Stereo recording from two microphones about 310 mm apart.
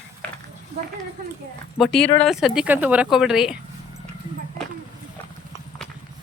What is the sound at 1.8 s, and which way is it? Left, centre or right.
A man's voice, centre.